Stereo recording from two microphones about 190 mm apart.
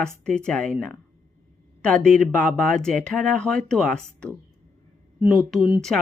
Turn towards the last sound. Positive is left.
turn(degrees=0)  # may be behind; listen again after turning